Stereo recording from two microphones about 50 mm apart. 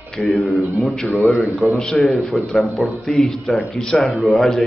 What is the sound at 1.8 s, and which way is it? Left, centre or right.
Speech, centre.